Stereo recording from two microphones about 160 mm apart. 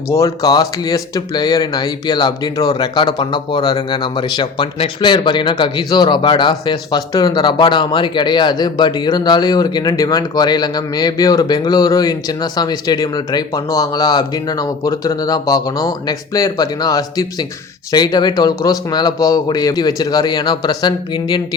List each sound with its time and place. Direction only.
0.1 s speech: 20° left (ahead or behind)